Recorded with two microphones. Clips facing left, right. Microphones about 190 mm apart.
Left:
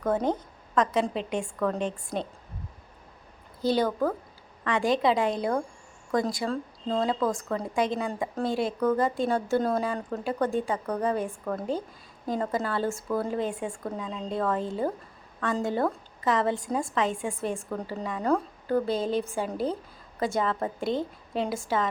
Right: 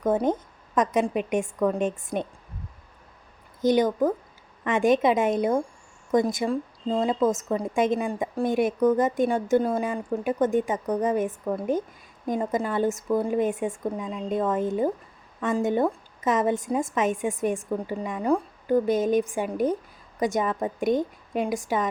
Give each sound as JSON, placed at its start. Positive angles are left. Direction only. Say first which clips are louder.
{"t": 0.0, "sound": "a woman's voice", "louder": "right 3 dB", "side_deg": -20}
{"t": 3.6, "sound": "a woman's voice", "louder": "right 4 dB", "side_deg": -20}